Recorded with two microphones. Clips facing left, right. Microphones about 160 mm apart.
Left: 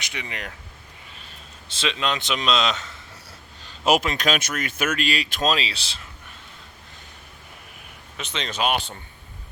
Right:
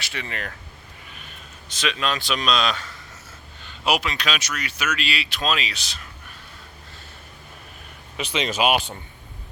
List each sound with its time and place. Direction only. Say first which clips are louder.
0.0 s speech: right 2 dB; 15° left (ahead or behind)
1.1 s a man's voice: right 2 dB; 30° left (ahead or behind)
3.6 s speech: left 3 dB; 40° left (ahead or behind)
8.1 s speech: right 5 dB; 5° right (ahead or behind)